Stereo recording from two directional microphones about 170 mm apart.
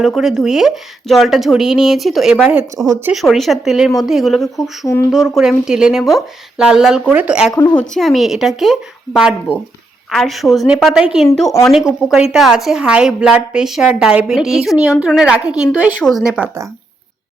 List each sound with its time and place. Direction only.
0.0 s a woman's voice: centre (ahead or behind)
7.5 s a woman's voice: 25° left (ahead or behind)
7.8 s a woman's voice: centre (ahead or behind)